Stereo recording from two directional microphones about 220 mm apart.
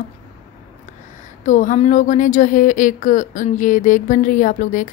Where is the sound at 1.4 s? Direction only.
35° left (ahead or behind).